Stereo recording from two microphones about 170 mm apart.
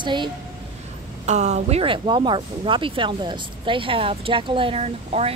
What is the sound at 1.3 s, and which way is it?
Speech, 40° right (ahead or behind).